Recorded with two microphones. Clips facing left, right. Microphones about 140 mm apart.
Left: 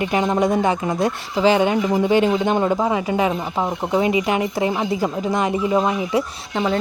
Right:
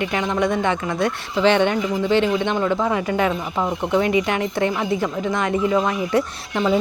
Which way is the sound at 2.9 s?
5° left (ahead or behind).